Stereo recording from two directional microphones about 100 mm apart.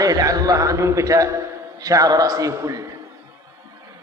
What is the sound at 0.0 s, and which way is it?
A man's voice, 35° right (ahead or behind).